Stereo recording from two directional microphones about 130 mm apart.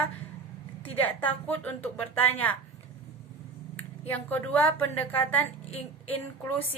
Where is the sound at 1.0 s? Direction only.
15° left (ahead or behind).